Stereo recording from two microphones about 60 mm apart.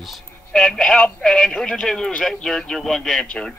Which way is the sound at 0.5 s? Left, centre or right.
Centre.